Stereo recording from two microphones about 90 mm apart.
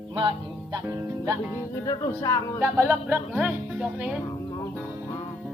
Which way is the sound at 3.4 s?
10° right (ahead or behind).